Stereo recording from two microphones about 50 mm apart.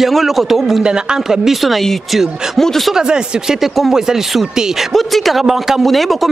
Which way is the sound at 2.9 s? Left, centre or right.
Centre.